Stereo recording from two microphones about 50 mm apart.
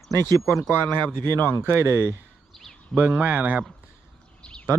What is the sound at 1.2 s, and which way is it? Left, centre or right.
Speech, left.